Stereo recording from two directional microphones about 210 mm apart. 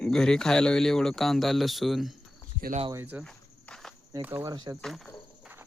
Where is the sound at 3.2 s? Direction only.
5° left (ahead or behind).